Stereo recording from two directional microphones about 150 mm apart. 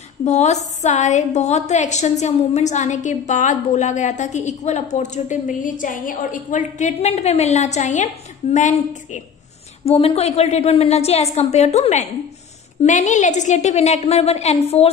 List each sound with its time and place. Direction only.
0.2 s a woman's voice: 50° left (ahead or behind)
9.8 s a woman's voice: 40° left (ahead or behind)